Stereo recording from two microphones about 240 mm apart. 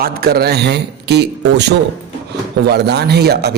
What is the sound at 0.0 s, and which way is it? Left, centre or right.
Speech, right.